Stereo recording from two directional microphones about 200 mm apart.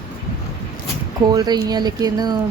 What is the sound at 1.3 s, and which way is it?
Speech, 20° right (ahead or behind).